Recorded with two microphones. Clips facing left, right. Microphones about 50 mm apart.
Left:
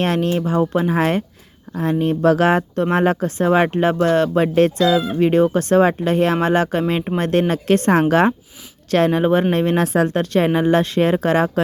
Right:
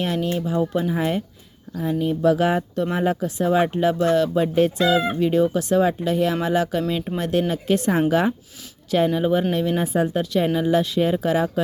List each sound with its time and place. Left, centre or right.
0.0 s speech: left
0.9 s speech: left
1.8 s speech: left
9.7 s speech: left